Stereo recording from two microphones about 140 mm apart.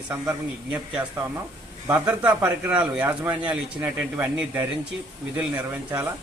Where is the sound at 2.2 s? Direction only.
10° right (ahead or behind).